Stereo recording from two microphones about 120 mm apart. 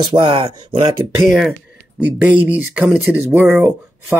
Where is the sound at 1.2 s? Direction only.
5° right (ahead or behind).